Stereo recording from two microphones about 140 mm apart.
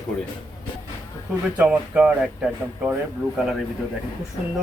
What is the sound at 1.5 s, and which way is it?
Speech, 10° right (ahead or behind).